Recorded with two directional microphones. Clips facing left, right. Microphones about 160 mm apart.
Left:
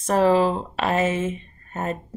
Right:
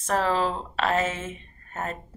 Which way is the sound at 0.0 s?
15° left (ahead or behind).